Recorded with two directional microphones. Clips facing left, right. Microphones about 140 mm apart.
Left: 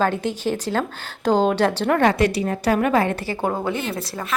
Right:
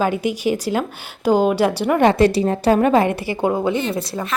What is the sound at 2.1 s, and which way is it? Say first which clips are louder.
A woman's voice: right 5 dB; 30° right (ahead or behind).